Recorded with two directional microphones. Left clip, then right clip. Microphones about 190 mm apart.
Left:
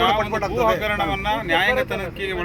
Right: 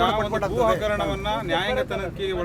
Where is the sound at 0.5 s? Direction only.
20° left (ahead or behind).